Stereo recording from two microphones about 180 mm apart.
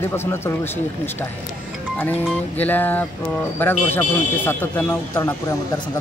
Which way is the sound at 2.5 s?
10° left (ahead or behind).